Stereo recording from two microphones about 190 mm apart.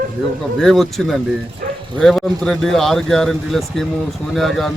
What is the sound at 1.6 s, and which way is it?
Bow-wow, 50° right (ahead or behind).